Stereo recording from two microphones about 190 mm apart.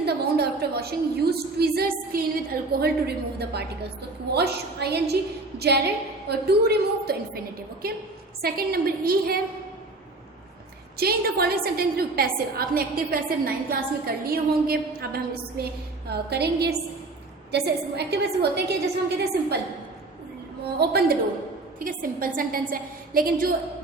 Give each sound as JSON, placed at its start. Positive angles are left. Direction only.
{"t": 0.0, "sound": "a woman's voice", "side_deg": -60}
{"t": 4.3, "sound": "a woman's voice", "side_deg": -60}
{"t": 10.9, "sound": "a woman's voice", "side_deg": -55}
{"t": 20.7, "sound": "a woman's voice", "side_deg": -55}
{"t": 21.8, "sound": "a woman's voice", "side_deg": -45}